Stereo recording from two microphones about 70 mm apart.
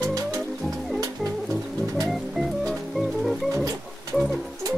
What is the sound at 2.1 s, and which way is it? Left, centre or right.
Music, centre.